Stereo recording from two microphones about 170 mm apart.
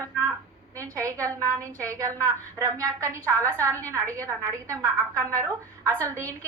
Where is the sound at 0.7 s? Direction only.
20° right (ahead or behind).